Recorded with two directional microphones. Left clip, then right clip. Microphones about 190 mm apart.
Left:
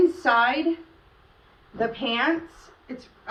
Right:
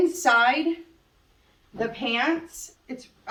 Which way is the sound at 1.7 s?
25° right (ahead or behind).